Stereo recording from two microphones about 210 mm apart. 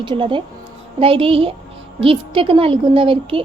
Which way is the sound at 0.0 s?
25° right (ahead or behind).